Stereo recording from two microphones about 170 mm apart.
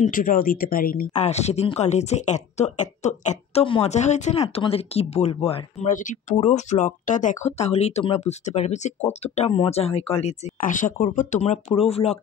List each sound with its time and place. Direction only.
0.0 s speech: 55° left (ahead or behind)
1.2 s speech: 40° left (ahead or behind)
5.9 s speech: 50° left (ahead or behind)